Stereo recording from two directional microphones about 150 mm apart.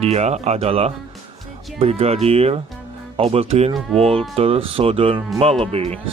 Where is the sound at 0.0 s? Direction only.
45° right (ahead or behind).